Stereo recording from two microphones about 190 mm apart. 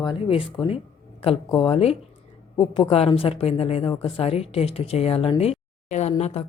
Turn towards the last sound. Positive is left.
turn(degrees=30)  # may be behind; listen again after turning